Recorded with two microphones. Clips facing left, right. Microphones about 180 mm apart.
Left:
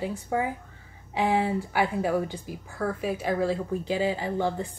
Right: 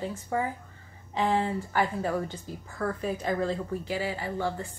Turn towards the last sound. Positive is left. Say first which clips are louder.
# left 4 dB
turn(degrees=20)  # may be behind; listen again after turning